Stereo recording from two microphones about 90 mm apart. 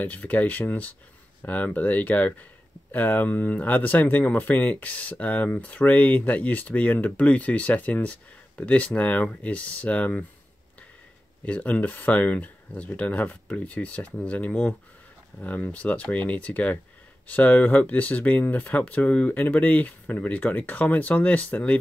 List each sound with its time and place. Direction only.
0.0 s speech: 15° left (ahead or behind)
11.4 s speech: 15° left (ahead or behind)